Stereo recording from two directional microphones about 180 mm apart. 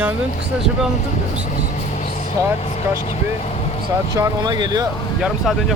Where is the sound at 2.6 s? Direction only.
40° left (ahead or behind).